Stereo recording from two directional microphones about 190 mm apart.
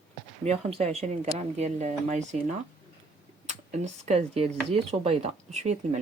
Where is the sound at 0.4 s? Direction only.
35° right (ahead or behind).